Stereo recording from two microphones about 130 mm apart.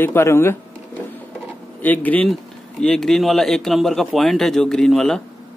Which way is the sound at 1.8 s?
10° left (ahead or behind).